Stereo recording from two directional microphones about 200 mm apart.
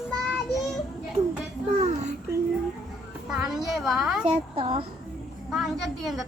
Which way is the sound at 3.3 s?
Centre (ahead or behind).